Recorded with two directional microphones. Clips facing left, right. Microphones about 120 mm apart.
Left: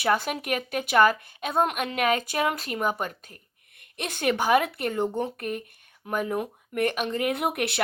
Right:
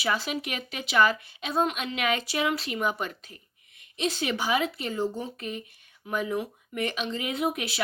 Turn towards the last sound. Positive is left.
turn(degrees=60)  # may be behind; listen again after turning